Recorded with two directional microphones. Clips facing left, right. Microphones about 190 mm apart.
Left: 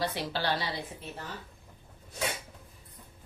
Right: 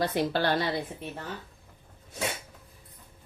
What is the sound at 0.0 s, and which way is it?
Speech, 50° right (ahead or behind).